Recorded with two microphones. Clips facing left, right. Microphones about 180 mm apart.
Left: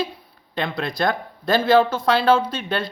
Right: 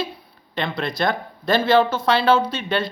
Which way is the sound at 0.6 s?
50° left (ahead or behind).